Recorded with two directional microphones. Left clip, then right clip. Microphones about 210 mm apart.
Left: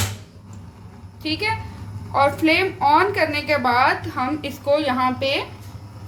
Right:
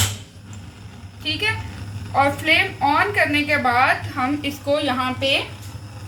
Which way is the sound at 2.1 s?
60° left (ahead or behind).